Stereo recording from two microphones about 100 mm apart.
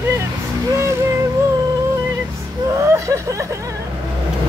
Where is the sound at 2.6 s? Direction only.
30° right (ahead or behind).